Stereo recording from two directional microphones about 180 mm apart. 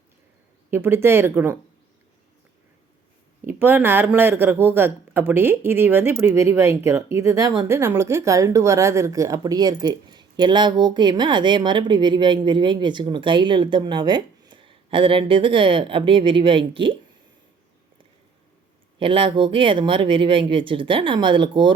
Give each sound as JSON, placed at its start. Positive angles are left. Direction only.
{"t": 0.7, "sound": "speech", "side_deg": -15}
{"t": 3.4, "sound": "speech", "side_deg": -10}
{"t": 18.9, "sound": "speech", "side_deg": -30}